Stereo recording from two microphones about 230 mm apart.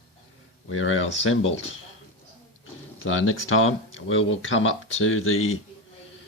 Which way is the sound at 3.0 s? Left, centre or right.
Left.